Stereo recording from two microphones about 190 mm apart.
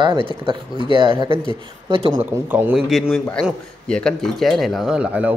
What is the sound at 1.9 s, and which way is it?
Speech, 25° right (ahead or behind).